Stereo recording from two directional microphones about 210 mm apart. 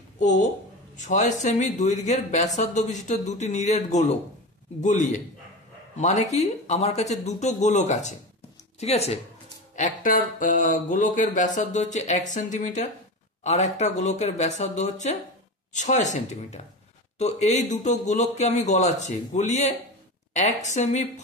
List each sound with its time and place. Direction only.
0.2 s speech: 35° left (ahead or behind)